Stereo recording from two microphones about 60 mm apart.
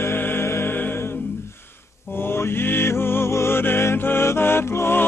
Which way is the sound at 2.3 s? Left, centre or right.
Left.